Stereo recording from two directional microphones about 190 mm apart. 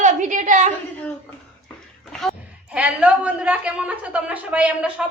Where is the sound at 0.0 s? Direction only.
40° right (ahead or behind).